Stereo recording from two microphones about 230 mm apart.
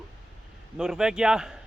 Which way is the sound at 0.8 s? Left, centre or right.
Centre.